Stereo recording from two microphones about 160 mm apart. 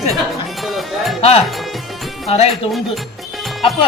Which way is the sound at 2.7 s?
Centre (ahead or behind).